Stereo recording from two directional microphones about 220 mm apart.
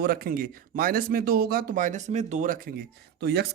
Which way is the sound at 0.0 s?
40° right (ahead or behind).